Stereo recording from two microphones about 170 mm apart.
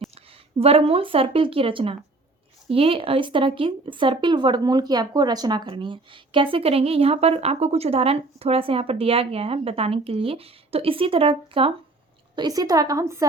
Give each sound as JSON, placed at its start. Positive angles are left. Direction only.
{"t": 0.6, "sound": "speech", "side_deg": -35}
{"t": 12.4, "sound": "a woman's voice", "side_deg": -20}